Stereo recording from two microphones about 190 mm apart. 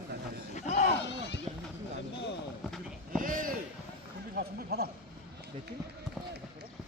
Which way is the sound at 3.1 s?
45° right (ahead or behind).